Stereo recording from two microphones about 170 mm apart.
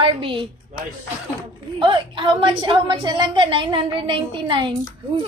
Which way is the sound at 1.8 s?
25° right (ahead or behind).